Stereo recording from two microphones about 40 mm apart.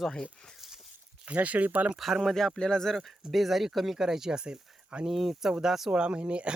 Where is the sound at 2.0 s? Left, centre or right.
Centre.